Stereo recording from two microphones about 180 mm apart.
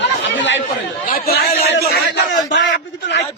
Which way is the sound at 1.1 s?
55° left (ahead or behind).